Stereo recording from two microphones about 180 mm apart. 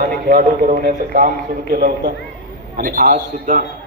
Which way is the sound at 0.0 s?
55° right (ahead or behind).